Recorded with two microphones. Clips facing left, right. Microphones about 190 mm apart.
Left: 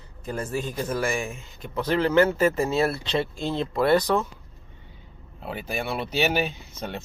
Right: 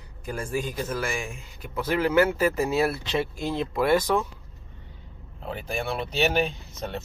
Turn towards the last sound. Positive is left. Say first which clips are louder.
# even
turn(degrees=5)  # may be behind; listen again after turning